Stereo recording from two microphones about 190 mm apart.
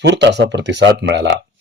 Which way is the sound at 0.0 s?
65° right (ahead or behind).